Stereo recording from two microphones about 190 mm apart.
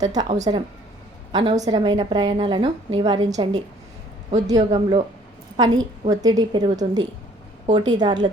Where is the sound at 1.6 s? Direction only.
20° right (ahead or behind).